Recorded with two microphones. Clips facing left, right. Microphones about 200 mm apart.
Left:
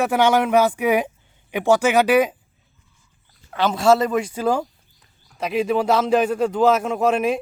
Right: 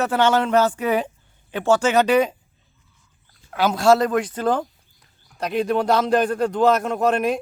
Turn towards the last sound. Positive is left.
turn(degrees=5)  # may be behind; listen again after turning